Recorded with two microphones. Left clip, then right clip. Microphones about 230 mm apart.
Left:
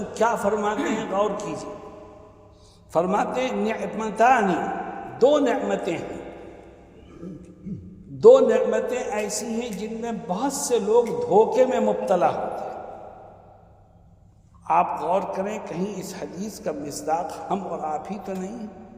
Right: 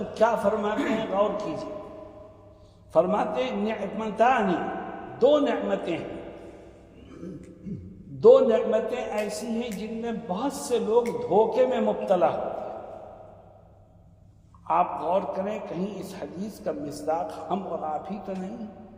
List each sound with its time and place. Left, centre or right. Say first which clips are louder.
0.1 s a man's voice: left 1 dB; left
2.9 s a man's voice: left 1 dB; left
8.2 s a man's voice: left 3 dB; left
14.7 s a man's voice: left 3 dB; left